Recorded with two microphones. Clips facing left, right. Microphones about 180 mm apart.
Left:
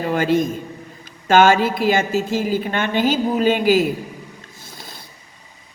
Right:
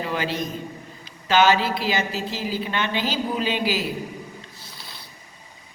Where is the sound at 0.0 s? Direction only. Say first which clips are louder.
Left 8 dB; 50° left (ahead or behind).